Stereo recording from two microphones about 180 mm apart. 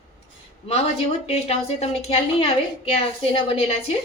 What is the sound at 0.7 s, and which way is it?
A woman's voice, 35° left (ahead or behind).